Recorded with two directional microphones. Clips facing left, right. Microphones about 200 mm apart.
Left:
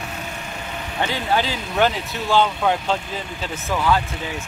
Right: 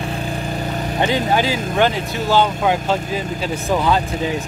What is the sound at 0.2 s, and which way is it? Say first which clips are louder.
Vehicle: right 8 dB; 35° right (ahead or behind).